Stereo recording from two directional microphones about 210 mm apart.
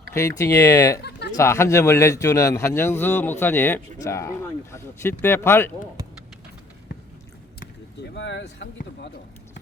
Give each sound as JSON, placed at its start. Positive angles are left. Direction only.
{"t": 0.1, "sound": "speech", "side_deg": 15}
{"t": 8.1, "sound": "speech", "side_deg": 60}